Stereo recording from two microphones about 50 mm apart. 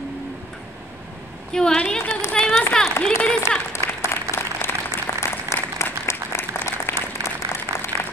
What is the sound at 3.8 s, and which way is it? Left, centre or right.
Applause, left.